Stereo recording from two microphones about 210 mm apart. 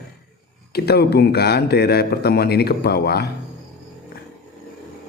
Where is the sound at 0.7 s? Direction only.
50° left (ahead or behind).